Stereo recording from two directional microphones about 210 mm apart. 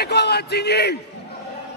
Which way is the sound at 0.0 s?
50° left (ahead or behind).